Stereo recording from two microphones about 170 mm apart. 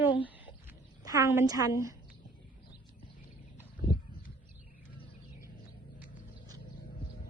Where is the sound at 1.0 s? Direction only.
15° right (ahead or behind).